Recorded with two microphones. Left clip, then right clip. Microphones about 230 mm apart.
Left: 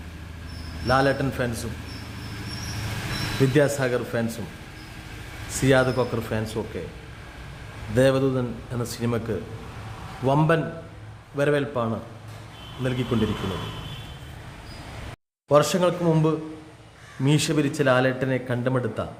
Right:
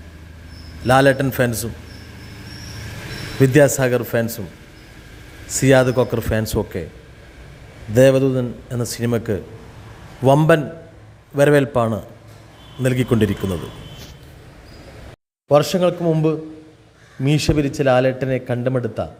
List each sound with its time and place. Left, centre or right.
0.9 s a man's voice: right
3.4 s a man's voice: right
5.5 s a man's voice: right
7.9 s a man's voice: right
15.4 s a man's voice: centre